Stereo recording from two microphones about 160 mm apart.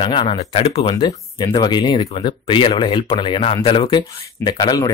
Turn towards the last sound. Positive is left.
turn(degrees=25)  # may be behind; listen again after turning